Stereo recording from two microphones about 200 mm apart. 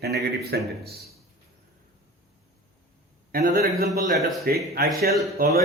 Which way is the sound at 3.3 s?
45° right (ahead or behind).